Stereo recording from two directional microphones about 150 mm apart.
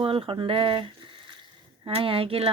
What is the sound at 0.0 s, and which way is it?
Speech, 35° right (ahead or behind).